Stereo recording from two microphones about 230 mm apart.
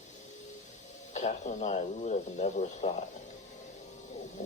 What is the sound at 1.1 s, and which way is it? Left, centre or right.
Speech, left.